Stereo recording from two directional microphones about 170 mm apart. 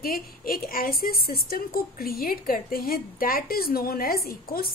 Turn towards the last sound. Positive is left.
turn(degrees=60)  # may be behind; listen again after turning